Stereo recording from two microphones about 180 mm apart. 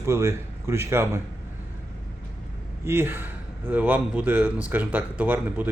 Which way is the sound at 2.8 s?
10° right (ahead or behind).